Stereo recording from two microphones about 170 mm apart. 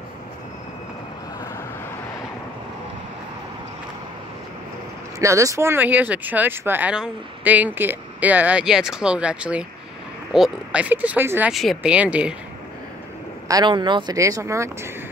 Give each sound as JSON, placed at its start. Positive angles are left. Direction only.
{"t": 5.2, "sound": "speech", "side_deg": -20}
{"t": 11.5, "sound": "speech", "side_deg": 0}
{"t": 13.5, "sound": "speech", "side_deg": -25}